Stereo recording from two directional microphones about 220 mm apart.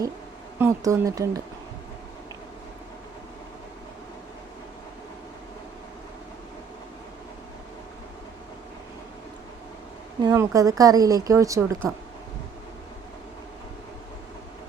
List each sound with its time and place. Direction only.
0.6 s speech: 15° right (ahead or behind)
10.2 s speech: 15° right (ahead or behind)